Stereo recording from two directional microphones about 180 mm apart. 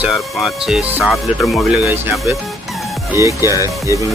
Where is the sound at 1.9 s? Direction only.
15° right (ahead or behind).